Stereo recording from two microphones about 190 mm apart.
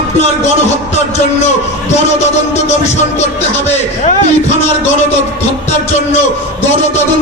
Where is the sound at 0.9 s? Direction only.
35° left (ahead or behind).